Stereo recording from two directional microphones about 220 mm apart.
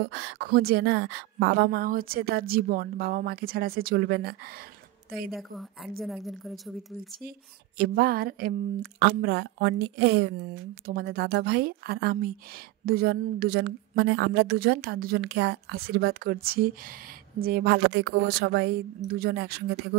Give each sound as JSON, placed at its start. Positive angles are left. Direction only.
{"t": 0.0, "sound": "a woman's voice", "side_deg": -55}
{"t": 5.3, "sound": "a woman's voice", "side_deg": 0}
{"t": 7.2, "sound": "a woman's voice", "side_deg": -45}